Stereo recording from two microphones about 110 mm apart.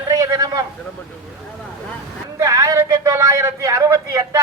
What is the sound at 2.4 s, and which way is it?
A man's voice, 30° right (ahead or behind).